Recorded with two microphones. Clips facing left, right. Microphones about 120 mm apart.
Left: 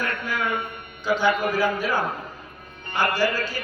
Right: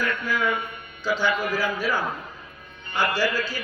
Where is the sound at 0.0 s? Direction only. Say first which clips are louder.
Right 1 dB; 55° left (ahead or behind).